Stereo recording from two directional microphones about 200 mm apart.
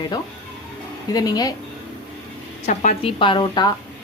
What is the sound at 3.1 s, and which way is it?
Speech, 25° left (ahead or behind).